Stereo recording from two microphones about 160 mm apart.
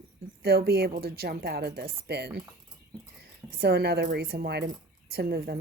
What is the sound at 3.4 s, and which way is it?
Speech, 85° right.